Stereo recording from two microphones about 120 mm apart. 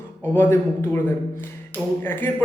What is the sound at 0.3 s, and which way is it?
Speech, 20° left (ahead or behind).